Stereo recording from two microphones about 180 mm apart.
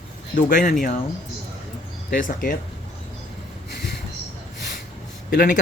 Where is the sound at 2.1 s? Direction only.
50° left (ahead or behind).